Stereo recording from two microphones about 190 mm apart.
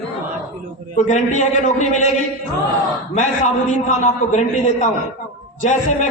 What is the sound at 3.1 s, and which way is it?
A man's voice, 40° left (ahead or behind).